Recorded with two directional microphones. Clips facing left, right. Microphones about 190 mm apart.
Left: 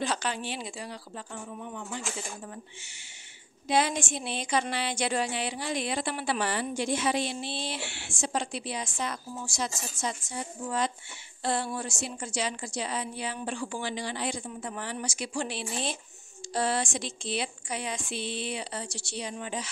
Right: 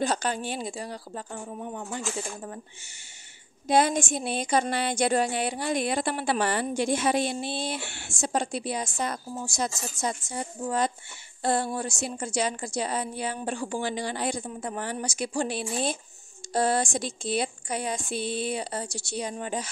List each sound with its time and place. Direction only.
0.0 s a woman's voice: 45° right (ahead or behind)
3.6 s a woman's voice: 45° right (ahead or behind)
11.4 s a woman's voice: 50° right (ahead or behind)